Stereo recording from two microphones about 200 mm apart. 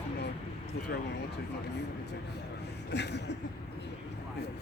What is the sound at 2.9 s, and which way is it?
Speech, 60° left (ahead or behind).